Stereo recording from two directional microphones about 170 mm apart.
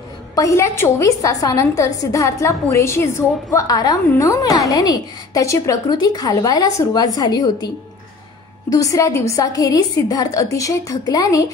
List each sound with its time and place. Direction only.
0.4 s a woman's voice: 15° left (ahead or behind)